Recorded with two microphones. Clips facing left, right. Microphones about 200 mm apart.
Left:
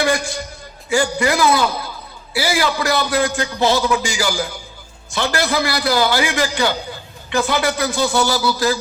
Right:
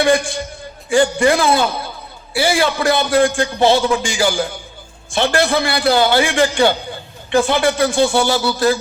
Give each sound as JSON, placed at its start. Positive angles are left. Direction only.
{"t": 0.0, "sound": "a man's voice", "side_deg": -30}